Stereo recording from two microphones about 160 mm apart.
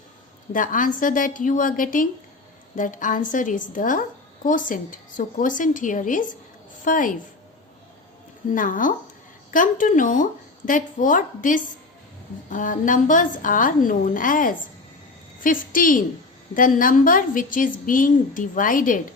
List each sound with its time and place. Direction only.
0.5 s a woman's voice: 55° left (ahead or behind)
8.5 s a woman's voice: 55° left (ahead or behind)